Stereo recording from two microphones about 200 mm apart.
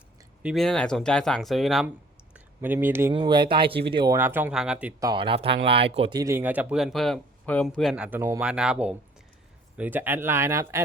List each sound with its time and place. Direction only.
0.4 s speech: centre (ahead or behind)
2.3 s a sound: 10° right (ahead or behind)
3.1 s speech: 25° right (ahead or behind); by 5.0 s 5° right (ahead or behind)
5.0 s speech: 25° right (ahead or behind)